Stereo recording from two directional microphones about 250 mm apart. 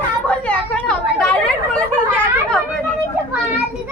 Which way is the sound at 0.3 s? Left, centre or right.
Centre.